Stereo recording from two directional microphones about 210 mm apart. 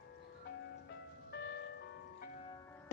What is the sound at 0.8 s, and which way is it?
Music, 55° left (ahead or behind).